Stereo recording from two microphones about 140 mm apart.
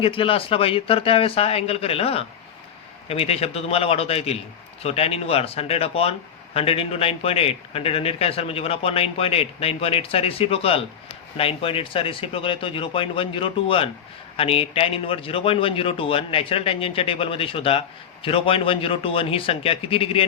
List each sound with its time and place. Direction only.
0.0 s a man's voice: 40° left (ahead or behind)